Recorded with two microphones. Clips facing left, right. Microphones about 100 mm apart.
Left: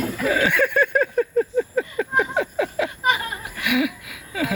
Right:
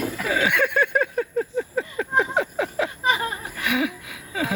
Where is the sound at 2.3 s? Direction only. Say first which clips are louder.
Left 1 dB; 20° right (ahead or behind).